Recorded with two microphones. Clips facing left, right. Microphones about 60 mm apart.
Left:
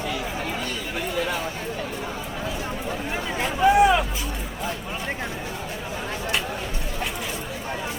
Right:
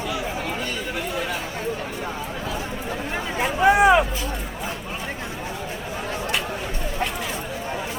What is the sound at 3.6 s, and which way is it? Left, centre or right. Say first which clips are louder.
Hubbub: right 2 dB; right.